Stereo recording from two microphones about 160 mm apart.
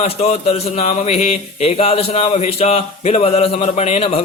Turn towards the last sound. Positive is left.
turn(degrees=40)  # may be behind; listen again after turning